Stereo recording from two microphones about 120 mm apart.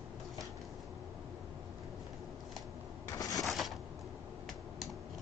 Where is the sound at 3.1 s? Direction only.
30° left (ahead or behind).